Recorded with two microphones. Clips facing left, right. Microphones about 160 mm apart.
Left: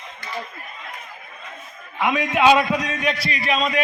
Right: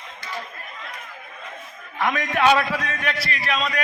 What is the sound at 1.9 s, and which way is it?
A man's voice, 10° left (ahead or behind).